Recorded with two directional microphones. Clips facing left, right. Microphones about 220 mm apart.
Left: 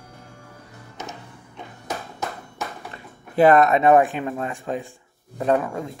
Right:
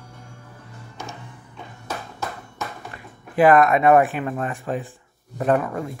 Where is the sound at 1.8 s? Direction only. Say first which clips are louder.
Left 1 dB; 15° left (ahead or behind).